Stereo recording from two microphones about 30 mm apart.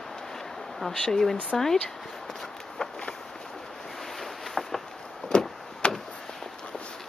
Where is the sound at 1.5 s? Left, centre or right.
Centre.